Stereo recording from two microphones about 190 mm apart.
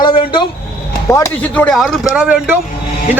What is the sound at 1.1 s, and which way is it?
Speech, 10° left (ahead or behind).